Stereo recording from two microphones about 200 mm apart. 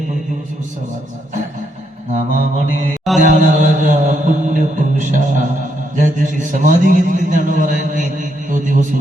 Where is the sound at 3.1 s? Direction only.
40° right (ahead or behind).